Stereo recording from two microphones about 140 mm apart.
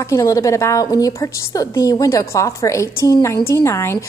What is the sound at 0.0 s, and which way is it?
A woman's voice, 20° left (ahead or behind).